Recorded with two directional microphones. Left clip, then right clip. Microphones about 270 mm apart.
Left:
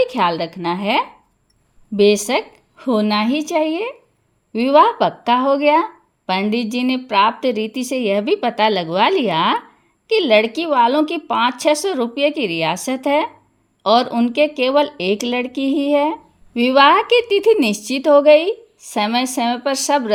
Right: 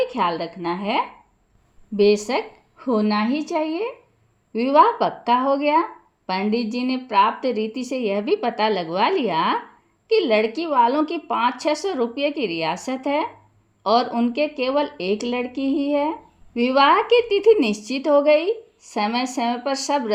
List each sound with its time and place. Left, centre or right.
0.0 s speech: left
17.7 s speech: left
17.9 s speech: left